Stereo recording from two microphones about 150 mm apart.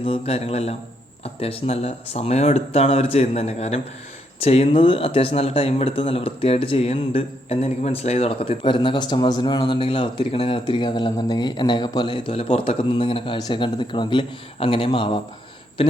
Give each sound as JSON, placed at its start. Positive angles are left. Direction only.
{"t": 0.0, "sound": "speech", "side_deg": 40}